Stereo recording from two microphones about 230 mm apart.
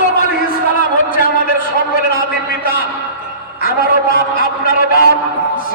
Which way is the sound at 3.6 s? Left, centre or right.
Left.